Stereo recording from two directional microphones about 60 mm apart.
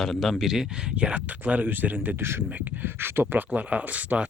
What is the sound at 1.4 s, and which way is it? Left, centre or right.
Speech, right.